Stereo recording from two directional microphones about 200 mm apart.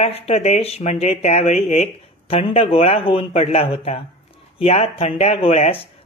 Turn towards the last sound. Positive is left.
turn(degrees=30)  # may be behind; listen again after turning